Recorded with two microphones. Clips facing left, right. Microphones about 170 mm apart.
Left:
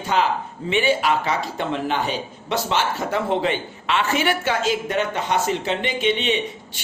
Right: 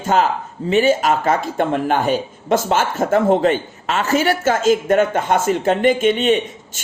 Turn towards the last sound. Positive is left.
turn(degrees=-50)  # may be behind; listen again after turning